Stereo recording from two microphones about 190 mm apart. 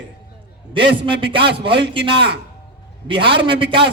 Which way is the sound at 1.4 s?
60° right (ahead or behind).